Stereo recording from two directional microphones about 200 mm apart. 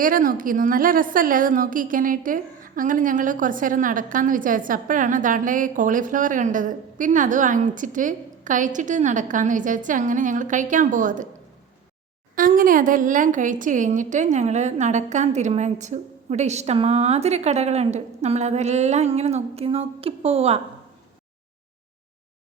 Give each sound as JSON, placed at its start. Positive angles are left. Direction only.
{"t": 0.0, "sound": "a woman's voice", "side_deg": -45}
{"t": 12.4, "sound": "a woman's voice", "side_deg": -45}